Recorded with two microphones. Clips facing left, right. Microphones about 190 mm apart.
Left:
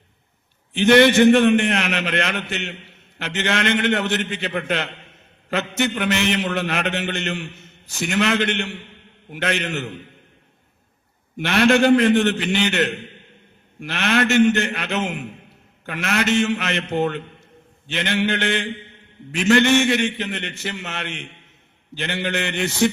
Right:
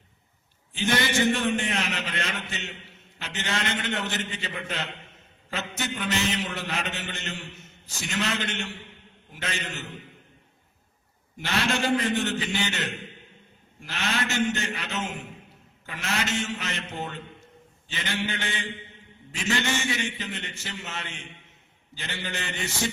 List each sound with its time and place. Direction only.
0.7 s a man's voice: 65° left (ahead or behind)
11.3 s a man's voice: 65° left (ahead or behind)